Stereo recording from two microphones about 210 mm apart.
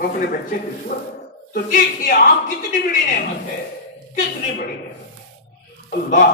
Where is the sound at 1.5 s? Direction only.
45° left (ahead or behind).